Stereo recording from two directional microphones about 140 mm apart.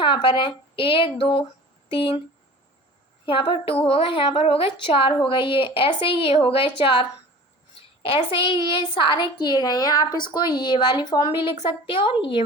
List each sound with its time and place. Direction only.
0.0 s a woman's voice: 35° left (ahead or behind)
3.2 s a woman's voice: 40° left (ahead or behind)